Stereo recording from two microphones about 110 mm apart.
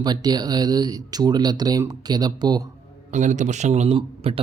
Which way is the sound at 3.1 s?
90° right.